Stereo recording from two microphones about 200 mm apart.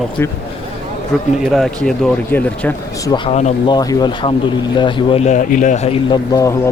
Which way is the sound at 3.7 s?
20° left (ahead or behind).